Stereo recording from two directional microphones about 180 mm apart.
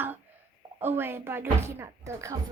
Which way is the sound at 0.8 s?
10° right (ahead or behind).